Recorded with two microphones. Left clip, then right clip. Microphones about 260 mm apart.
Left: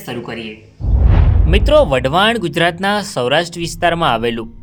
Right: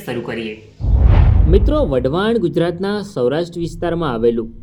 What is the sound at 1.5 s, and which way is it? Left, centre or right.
Speech, left.